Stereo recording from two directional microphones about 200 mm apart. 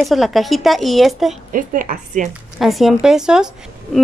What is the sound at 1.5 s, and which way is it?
Speech, 45° right (ahead or behind).